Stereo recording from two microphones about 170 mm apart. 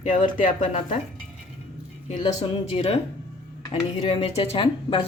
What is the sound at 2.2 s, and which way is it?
Speech, 35° left (ahead or behind).